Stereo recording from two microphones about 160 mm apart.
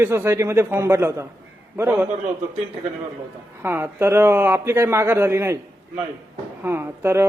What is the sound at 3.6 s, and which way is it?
Speech, 15° right (ahead or behind).